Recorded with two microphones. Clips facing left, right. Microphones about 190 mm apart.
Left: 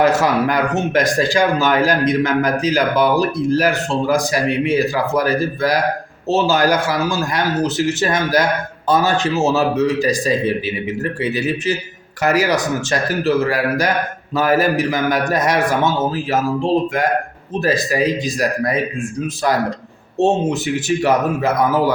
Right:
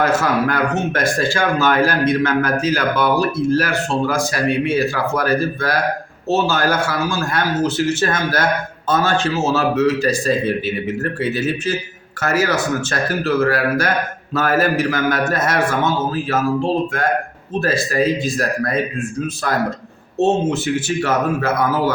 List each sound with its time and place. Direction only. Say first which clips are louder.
0.0 s speech: left 2 dB; 15° left (ahead or behind)
20.1 s speech: even; 15° left (ahead or behind)